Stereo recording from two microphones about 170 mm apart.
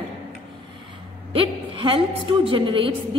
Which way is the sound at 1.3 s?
30° right (ahead or behind).